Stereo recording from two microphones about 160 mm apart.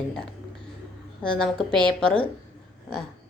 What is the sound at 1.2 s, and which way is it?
A woman's voice, 5° left (ahead or behind).